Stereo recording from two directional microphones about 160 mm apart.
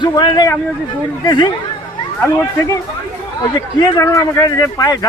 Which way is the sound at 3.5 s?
25° left (ahead or behind).